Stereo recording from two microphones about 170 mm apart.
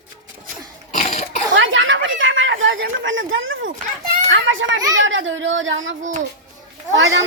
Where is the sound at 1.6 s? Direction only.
90° right.